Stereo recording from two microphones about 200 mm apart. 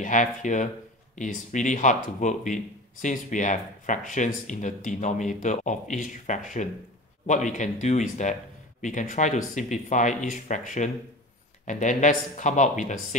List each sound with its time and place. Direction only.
0.0 s speech: 40° left (ahead or behind)